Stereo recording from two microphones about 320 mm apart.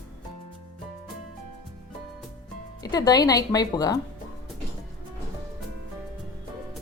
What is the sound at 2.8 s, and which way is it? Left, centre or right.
Speech, centre.